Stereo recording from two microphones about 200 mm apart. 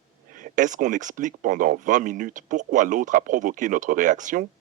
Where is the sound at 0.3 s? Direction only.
40° right (ahead or behind).